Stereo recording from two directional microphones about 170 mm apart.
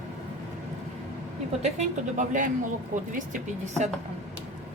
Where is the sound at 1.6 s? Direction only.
45° right (ahead or behind).